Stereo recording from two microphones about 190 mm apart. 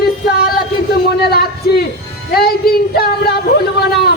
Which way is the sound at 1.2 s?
55° left (ahead or behind).